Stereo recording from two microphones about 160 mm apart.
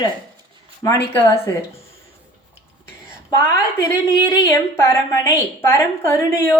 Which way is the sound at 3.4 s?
15° left (ahead or behind).